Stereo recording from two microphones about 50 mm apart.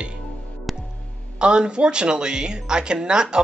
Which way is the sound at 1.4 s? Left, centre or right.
Centre.